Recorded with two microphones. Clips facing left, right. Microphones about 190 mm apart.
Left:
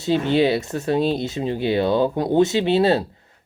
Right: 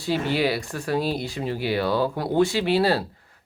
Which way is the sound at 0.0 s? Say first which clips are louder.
Left 5 dB; 25° left (ahead or behind).